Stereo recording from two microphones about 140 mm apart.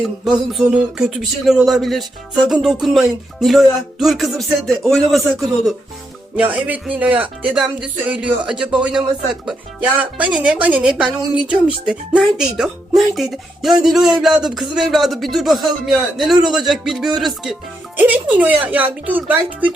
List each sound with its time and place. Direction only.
0.3 s speech: 5° right (ahead or behind)
17.9 s speech: 10° right (ahead or behind)